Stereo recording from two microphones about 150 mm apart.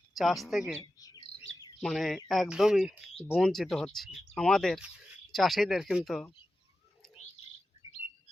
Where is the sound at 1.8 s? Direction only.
Centre (ahead or behind).